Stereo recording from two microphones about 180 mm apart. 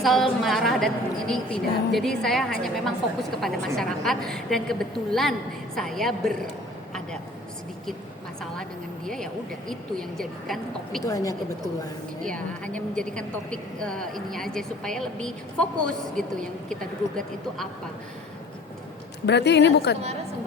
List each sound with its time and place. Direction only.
0.0 s a woman's voice: centre (ahead or behind)
9.0 s a woman's voice: 5° left (ahead or behind)
11.0 s a woman's voice: 20° left (ahead or behind)
12.2 s a woman's voice: 5° left (ahead or behind)
19.2 s a woman's voice: 70° left (ahead or behind)